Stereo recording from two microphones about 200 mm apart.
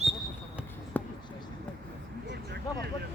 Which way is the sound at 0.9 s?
10° left (ahead or behind).